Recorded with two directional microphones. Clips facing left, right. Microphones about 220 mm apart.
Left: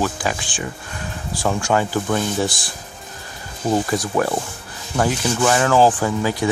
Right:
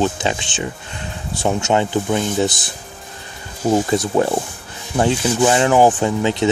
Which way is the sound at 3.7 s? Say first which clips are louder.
Right 3 dB; 25° right (ahead or behind).